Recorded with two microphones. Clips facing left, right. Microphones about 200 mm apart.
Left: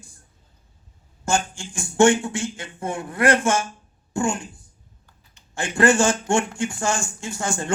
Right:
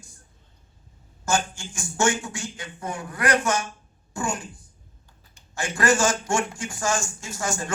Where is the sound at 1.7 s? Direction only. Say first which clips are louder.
Left 8 dB; 60° left (ahead or behind).